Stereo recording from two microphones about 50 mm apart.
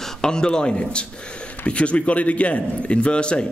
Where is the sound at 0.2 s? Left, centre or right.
Centre.